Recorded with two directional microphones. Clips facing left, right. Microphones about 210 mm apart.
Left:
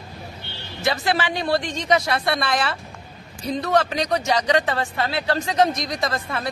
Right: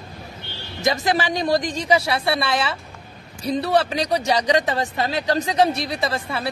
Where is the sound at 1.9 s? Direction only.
10° right (ahead or behind).